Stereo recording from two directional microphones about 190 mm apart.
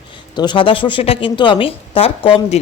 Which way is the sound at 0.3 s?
25° left (ahead or behind).